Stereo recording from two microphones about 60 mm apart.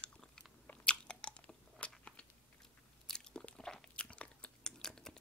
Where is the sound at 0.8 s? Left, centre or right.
Centre.